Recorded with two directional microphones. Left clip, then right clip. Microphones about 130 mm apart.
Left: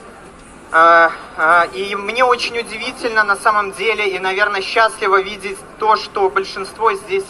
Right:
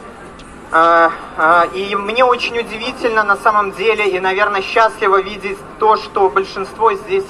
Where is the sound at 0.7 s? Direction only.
15° left (ahead or behind).